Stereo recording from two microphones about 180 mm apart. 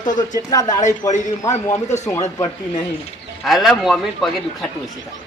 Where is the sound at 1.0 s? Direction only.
20° left (ahead or behind).